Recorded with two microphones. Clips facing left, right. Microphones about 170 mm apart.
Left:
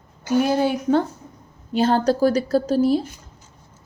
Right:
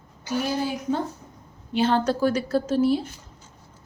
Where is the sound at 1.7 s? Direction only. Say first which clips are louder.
Left 3 dB; 40° left (ahead or behind).